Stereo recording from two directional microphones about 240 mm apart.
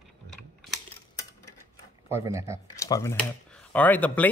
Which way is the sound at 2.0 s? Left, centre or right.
Centre.